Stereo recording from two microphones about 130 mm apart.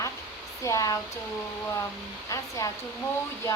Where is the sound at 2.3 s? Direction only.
25° left (ahead or behind).